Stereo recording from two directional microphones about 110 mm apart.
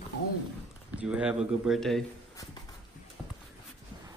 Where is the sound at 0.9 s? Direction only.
10° right (ahead or behind).